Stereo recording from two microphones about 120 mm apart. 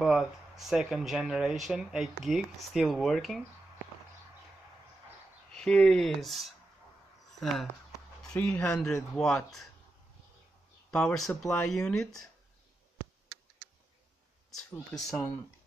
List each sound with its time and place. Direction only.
0.0 s speech: 5° right (ahead or behind)
5.5 s speech: 5° left (ahead or behind)
7.9 s a sound: 30° left (ahead or behind)
8.4 s speech: 10° left (ahead or behind)
10.9 s speech: 10° left (ahead or behind)
14.5 s speech: centre (ahead or behind)